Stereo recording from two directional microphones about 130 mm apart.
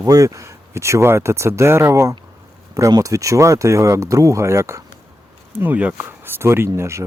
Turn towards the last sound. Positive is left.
turn(degrees=-20)  # may be behind; listen again after turning